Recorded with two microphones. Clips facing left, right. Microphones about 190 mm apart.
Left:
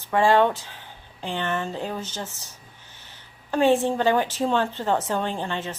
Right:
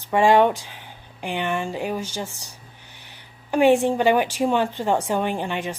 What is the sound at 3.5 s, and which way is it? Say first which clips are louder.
A woman's voice: right 3 dB; 15° right (ahead or behind).